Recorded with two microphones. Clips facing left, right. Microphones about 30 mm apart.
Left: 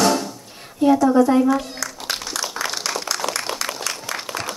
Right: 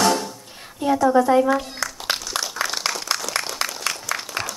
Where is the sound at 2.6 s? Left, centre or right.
Left.